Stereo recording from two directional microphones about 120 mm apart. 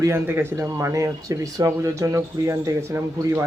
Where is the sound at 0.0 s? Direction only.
20° right (ahead or behind).